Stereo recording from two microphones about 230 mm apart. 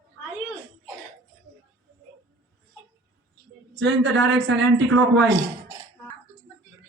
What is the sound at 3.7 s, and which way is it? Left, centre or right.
A man's voice, right.